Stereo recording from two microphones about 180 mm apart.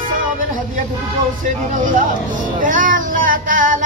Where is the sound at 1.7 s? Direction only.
45° right (ahead or behind).